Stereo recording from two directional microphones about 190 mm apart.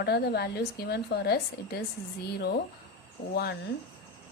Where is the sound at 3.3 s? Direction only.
55° left (ahead or behind).